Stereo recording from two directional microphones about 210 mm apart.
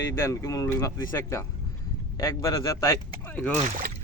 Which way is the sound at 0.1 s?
15° left (ahead or behind).